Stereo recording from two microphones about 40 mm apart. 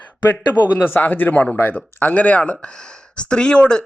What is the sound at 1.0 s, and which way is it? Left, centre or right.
A man's voice, left.